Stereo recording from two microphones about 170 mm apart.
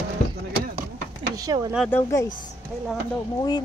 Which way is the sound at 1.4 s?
20° right (ahead or behind).